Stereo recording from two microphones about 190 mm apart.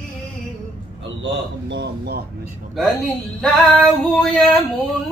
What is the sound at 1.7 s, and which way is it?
Speech, 60° right (ahead or behind).